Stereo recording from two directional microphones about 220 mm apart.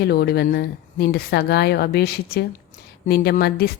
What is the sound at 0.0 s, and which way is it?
A woman's voice, 45° left (ahead or behind).